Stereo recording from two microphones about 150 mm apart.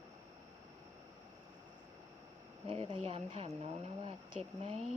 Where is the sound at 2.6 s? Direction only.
40° right (ahead or behind).